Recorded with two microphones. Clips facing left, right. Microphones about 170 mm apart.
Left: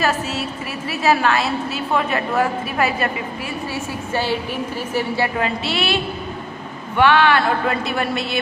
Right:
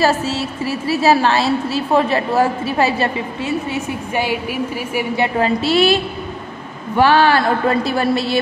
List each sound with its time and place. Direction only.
0.0 s a woman's voice: 30° right (ahead or behind)
5.4 s a woman's voice: 40° right (ahead or behind)
7.0 s a woman's voice: 35° right (ahead or behind)